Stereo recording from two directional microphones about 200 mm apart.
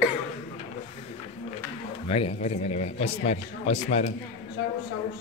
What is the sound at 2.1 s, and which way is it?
A man's voice, 30° left (ahead or behind).